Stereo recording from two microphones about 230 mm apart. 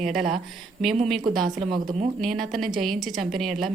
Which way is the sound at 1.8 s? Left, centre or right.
Right.